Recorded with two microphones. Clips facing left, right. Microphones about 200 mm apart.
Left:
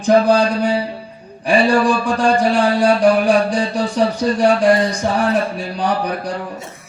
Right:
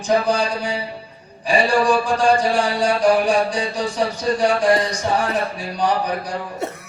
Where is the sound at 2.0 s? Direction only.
55° left (ahead or behind).